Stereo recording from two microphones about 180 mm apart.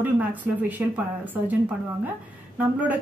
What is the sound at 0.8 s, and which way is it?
A woman's voice, 10° right (ahead or behind).